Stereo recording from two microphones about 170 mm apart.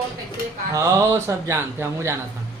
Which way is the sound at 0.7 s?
20° right (ahead or behind).